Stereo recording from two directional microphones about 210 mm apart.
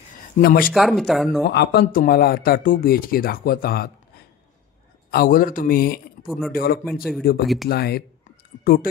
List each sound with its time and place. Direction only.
0.4 s speech: 45° left (ahead or behind)
0.7 s speech: centre (ahead or behind)
1.5 s speech: 50° left (ahead or behind)
5.1 s speech: 45° left (ahead or behind)
6.2 s speech: centre (ahead or behind)
6.5 s speech: 45° left (ahead or behind)
6.8 s speech: centre (ahead or behind)
7.6 s speech: 50° left (ahead or behind)